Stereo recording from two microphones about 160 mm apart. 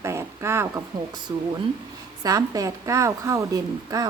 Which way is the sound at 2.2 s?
20° right (ahead or behind).